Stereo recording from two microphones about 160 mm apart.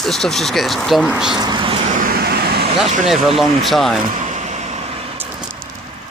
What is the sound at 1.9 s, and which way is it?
Vehicle, 65° right (ahead or behind).